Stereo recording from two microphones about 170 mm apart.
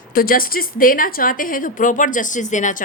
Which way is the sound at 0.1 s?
60° left (ahead or behind).